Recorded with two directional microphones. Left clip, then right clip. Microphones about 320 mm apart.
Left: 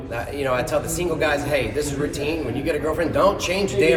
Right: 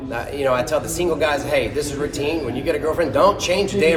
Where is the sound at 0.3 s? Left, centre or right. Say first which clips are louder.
Right 3 dB; centre.